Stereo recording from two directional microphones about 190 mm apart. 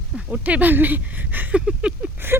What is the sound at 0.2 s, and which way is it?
Speech, 5° right (ahead or behind).